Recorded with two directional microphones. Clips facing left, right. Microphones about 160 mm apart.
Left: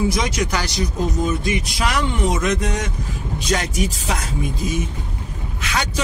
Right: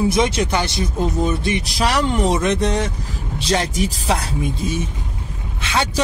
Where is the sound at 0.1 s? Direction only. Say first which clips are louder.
Right 4 dB; 30° right (ahead or behind).